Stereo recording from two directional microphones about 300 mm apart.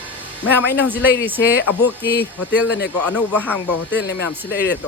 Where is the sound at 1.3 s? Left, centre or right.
Centre.